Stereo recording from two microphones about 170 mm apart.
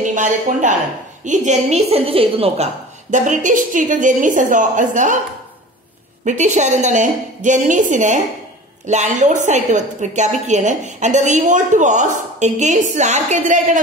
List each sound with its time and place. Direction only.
0.0 s a woman's voice: 50° right (ahead or behind)
6.2 s a woman's voice: 45° right (ahead or behind)